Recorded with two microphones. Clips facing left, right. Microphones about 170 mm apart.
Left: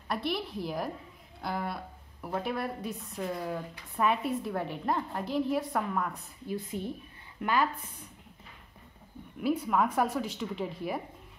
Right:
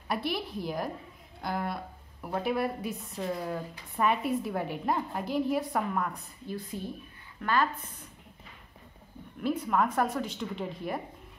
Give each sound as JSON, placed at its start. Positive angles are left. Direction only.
{"t": 0.1, "sound": "a woman's voice", "side_deg": -5}
{"t": 6.4, "sound": "a woman's voice", "side_deg": 20}
{"t": 9.4, "sound": "a woman's voice", "side_deg": 5}